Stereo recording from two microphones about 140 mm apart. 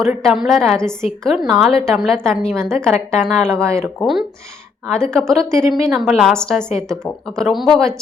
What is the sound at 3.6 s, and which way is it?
Speech, 20° right (ahead or behind).